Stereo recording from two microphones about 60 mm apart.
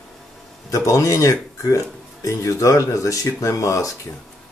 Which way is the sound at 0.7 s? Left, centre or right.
Left.